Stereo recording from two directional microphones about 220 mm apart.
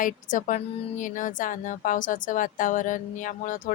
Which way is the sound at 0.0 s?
35° left (ahead or behind).